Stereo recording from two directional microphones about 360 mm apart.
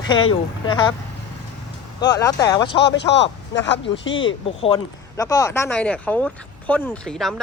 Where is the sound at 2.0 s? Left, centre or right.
Centre.